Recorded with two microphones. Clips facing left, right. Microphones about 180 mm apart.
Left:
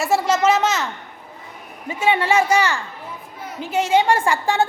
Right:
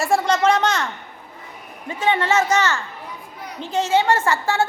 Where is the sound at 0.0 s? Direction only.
5° left (ahead or behind).